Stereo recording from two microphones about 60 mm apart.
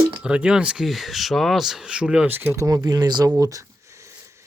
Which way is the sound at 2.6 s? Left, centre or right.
Right.